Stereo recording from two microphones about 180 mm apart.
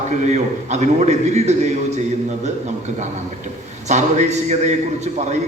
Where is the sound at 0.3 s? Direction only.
40° right (ahead or behind).